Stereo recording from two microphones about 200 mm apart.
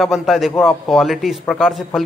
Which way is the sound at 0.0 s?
Centre (ahead or behind).